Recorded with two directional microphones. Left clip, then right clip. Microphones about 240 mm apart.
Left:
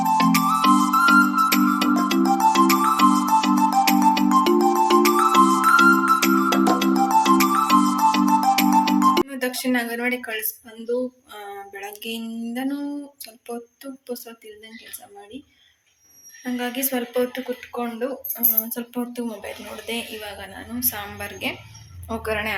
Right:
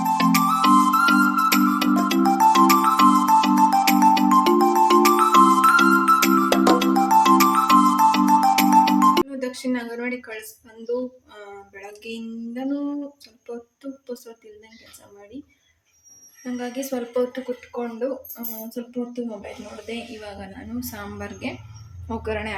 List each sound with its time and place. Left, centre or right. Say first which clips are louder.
0.0 s music: left 1 dB; centre
11.3 s a sound: left 8 dB; centre
13.5 s speech: left 2 dB; centre
16.4 s speech: left 3 dB; centre